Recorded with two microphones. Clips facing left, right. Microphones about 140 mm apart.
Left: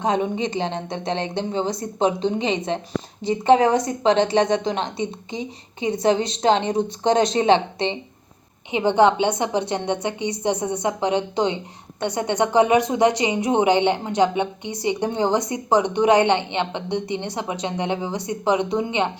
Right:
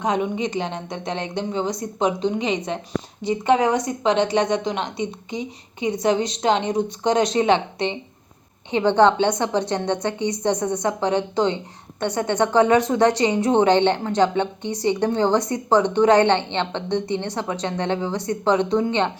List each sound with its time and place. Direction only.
0.0 s a woman's voice: 30° left (ahead or behind)
8.7 s a woman's voice: 10° left (ahead or behind)